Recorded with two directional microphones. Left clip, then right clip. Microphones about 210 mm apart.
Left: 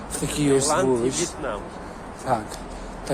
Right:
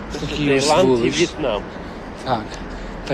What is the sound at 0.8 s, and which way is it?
Speech, 15° left (ahead or behind).